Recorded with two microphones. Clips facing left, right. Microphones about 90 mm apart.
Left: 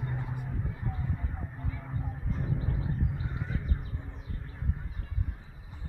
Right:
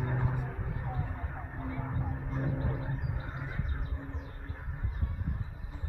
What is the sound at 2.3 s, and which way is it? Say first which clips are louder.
Wild animals: even; 40° right (ahead or behind).